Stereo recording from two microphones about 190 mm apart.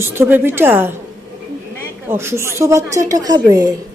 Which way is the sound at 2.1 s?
15° right (ahead or behind).